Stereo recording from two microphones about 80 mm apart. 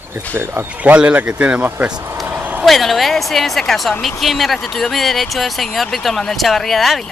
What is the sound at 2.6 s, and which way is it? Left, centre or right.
A woman's voice, centre.